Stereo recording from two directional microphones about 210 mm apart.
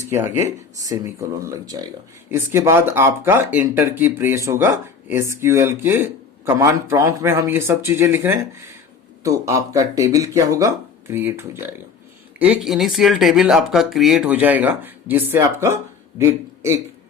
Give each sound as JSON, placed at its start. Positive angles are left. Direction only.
{"t": 0.3, "sound": "a man's voice", "side_deg": -15}